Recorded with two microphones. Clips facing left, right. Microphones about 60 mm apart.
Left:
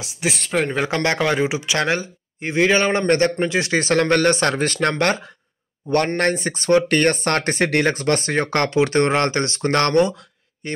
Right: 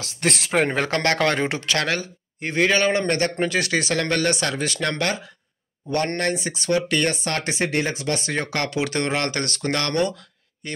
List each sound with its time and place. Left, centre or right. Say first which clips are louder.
0.0 s speech: even; centre
0.5 s speech: even; centre
0.8 s a man's voice: left 1 dB; centre
1.2 s speech: left 2 dB; centre
1.8 s a man's voice: left 3 dB; left
9.9 s a sound: left 6 dB; left